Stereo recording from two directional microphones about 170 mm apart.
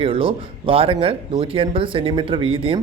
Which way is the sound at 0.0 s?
30° right (ahead or behind).